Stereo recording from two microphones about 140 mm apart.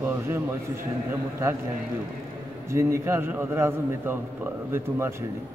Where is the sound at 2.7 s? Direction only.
20° right (ahead or behind).